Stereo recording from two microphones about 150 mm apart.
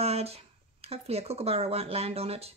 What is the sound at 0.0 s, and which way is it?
Speech, 45° right (ahead or behind).